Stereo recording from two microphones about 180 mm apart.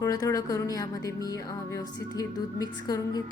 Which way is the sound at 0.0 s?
20° left (ahead or behind).